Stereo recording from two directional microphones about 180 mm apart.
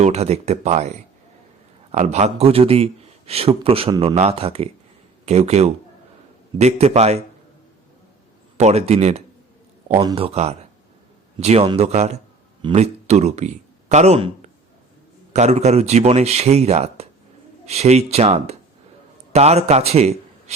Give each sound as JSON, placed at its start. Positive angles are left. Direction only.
{"t": 0.0, "sound": "a man's voice", "side_deg": -35}
{"t": 8.5, "sound": "a man's voice", "side_deg": -35}